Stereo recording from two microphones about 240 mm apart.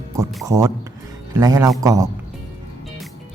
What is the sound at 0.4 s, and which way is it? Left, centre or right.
Speech, centre.